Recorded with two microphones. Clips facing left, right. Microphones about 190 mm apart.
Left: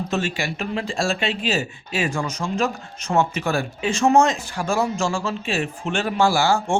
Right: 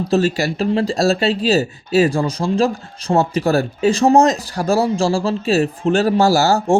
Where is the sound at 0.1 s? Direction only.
35° right (ahead or behind).